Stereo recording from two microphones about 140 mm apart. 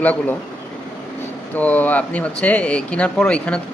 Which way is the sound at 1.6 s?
10° left (ahead or behind).